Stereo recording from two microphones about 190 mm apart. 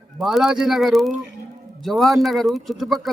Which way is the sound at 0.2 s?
Centre (ahead or behind).